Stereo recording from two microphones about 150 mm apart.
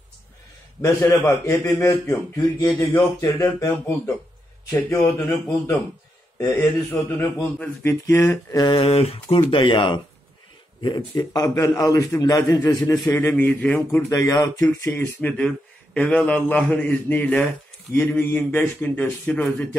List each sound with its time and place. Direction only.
0.7 s a man's voice: 20° left (ahead or behind)
6.3 s a man's voice: 15° left (ahead or behind)
7.3 s speech: 5° left (ahead or behind)
8.1 s a man's voice: 20° left (ahead or behind)
8.7 s a man's voice: 45° left (ahead or behind); by 14.1 s 10° left (ahead or behind)
14.1 s a man's voice: 25° left (ahead or behind)
14.9 s a man's voice: 10° left (ahead or behind)